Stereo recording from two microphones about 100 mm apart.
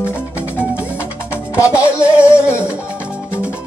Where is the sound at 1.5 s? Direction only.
15° right (ahead or behind).